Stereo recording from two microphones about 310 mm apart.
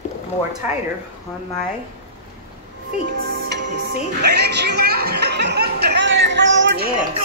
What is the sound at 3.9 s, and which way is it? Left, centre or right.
Speech, right.